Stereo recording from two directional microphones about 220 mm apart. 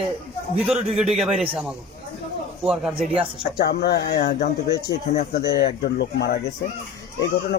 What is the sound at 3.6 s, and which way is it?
Speech, 50° left (ahead or behind).